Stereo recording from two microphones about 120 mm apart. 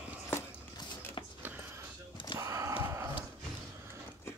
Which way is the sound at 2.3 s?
25° right (ahead or behind).